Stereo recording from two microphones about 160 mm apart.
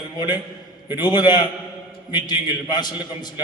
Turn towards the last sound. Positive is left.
turn(degrees=25)  # may be behind; listen again after turning